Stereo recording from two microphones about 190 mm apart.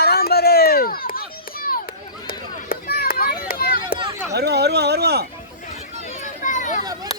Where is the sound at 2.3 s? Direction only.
55° left (ahead or behind).